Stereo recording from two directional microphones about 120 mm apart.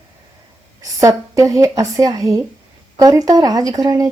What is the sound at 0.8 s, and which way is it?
Speech, 30° right (ahead or behind).